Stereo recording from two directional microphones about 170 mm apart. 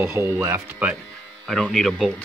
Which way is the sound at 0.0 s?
15° right (ahead or behind).